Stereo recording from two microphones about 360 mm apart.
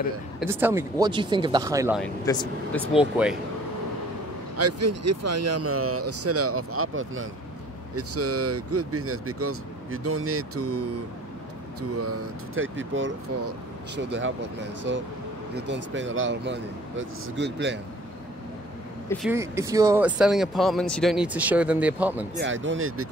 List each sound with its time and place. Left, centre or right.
0.4 s speech: centre
2.0 s speech: centre
3.0 s speech: centre
4.6 s speech: right
12.0 s speech: right
19.2 s speech: centre
22.3 s speech: right